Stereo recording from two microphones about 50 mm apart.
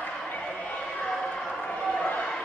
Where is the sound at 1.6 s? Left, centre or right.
Left.